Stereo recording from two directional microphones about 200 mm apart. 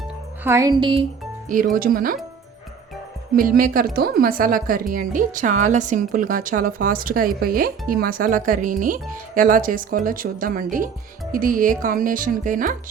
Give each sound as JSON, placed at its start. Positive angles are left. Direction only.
{"t": 0.4, "sound": "speech", "side_deg": -15}
{"t": 1.5, "sound": "a woman's voice", "side_deg": -40}
{"t": 3.3, "sound": "a woman's voice", "side_deg": -45}